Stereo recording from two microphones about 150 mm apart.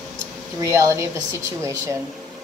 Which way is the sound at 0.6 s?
20° right (ahead or behind).